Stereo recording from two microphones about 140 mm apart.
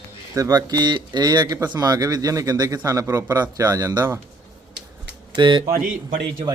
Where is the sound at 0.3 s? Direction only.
25° right (ahead or behind).